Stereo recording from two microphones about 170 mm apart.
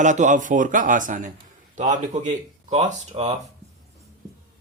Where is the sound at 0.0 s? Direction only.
45° right (ahead or behind).